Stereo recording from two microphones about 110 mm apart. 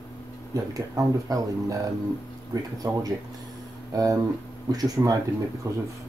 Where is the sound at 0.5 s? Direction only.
30° right (ahead or behind).